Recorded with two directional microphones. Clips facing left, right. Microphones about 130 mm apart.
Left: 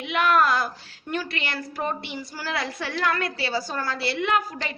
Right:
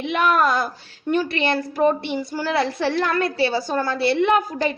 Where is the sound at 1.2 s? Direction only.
25° right (ahead or behind).